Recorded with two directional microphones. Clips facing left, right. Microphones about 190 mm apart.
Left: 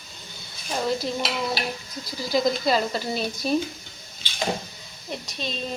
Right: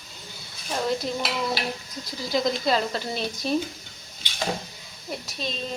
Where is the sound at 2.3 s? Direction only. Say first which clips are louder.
Left 2 dB; 5° left (ahead or behind).